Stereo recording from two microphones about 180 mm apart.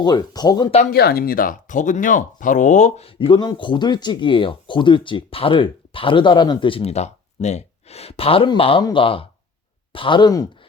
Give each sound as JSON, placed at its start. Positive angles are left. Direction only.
{"t": 0.0, "sound": "speech", "side_deg": 20}
{"t": 0.9, "sound": "speech", "side_deg": 60}